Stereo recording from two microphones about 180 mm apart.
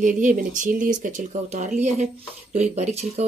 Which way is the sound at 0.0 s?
45° right (ahead or behind).